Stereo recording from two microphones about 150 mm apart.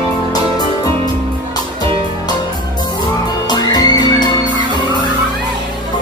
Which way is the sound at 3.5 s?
25° left (ahead or behind).